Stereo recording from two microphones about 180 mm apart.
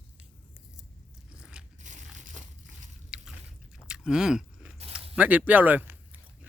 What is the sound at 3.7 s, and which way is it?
Biting, 5° right (ahead or behind).